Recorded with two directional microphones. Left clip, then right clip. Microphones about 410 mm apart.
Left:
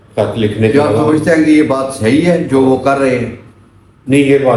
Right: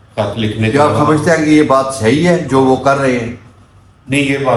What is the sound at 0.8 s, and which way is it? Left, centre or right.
Speech, right.